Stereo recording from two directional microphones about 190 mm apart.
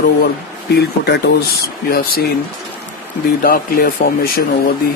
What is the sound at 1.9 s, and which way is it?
Speech, 50° left (ahead or behind).